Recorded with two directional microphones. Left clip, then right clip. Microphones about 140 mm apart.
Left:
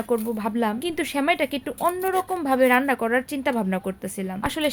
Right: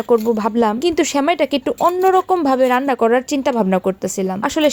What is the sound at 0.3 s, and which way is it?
Speech, 45° right (ahead or behind).